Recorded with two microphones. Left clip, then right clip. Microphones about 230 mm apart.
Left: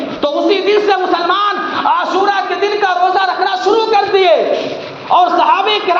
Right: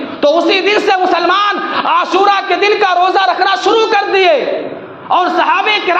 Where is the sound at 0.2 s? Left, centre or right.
Right.